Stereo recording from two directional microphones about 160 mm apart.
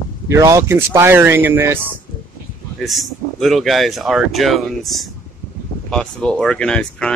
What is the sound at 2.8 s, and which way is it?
A man's voice, centre (ahead or behind).